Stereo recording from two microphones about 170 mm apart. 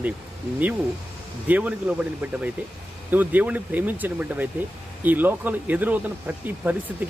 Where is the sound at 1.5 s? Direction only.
10° right (ahead or behind).